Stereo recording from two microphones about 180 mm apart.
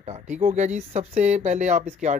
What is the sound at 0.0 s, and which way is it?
Speech, 40° right (ahead or behind).